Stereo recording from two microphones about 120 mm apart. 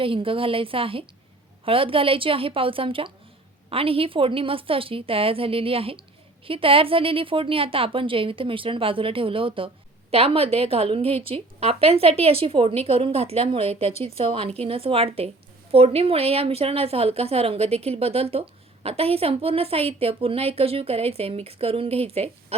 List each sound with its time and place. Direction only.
0.0 s a woman's voice: 50° right (ahead or behind)